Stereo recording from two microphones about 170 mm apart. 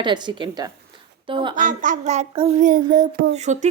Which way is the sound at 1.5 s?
50° right (ahead or behind).